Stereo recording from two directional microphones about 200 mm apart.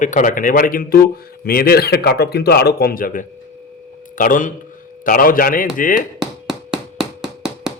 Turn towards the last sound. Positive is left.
turn(degrees=-5)  # may be behind; listen again after turning